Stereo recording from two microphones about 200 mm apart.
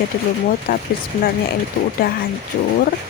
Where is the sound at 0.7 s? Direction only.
45° left (ahead or behind).